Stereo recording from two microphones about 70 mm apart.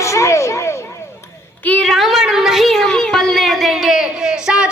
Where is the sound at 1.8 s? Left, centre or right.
Centre.